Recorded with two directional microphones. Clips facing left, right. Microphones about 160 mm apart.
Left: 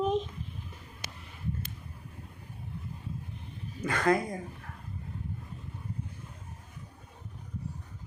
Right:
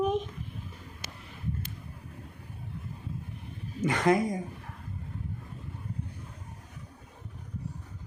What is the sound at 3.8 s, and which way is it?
Speech, 20° right (ahead or behind).